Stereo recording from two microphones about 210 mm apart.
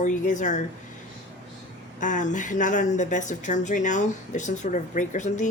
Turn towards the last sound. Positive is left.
turn(degrees=35)  # may be behind; listen again after turning